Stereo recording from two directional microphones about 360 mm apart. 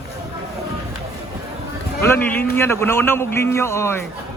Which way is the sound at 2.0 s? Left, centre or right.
Centre.